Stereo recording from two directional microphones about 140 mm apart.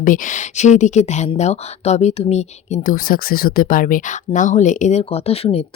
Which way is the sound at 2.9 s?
90° left.